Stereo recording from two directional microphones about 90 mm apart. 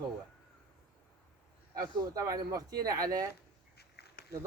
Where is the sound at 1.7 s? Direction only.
45° right (ahead or behind).